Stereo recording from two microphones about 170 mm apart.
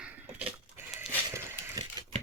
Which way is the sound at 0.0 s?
10° right (ahead or behind).